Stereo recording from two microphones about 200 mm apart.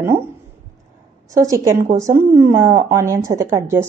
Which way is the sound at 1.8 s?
40° right (ahead or behind).